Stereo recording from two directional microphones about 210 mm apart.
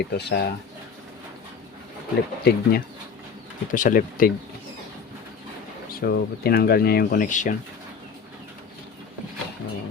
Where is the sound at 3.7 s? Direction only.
40° left (ahead or behind).